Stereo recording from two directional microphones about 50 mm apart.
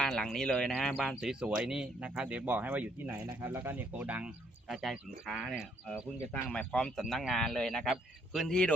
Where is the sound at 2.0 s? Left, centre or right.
Right.